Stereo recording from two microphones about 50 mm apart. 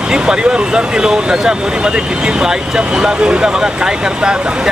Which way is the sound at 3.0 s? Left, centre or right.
Centre.